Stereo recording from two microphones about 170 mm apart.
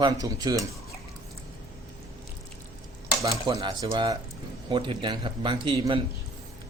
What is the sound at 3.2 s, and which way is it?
Speech, 20° right (ahead or behind).